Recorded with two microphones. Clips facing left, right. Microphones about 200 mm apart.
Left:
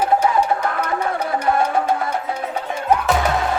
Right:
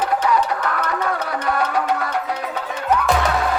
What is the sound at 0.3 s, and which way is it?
Music, 25° left (ahead or behind).